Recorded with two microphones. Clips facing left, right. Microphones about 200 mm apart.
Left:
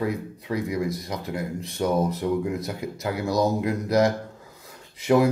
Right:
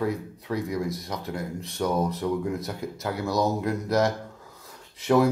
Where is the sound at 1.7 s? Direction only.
15° left (ahead or behind).